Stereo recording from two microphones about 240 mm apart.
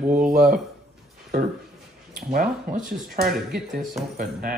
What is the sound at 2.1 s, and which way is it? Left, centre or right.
Speech, right.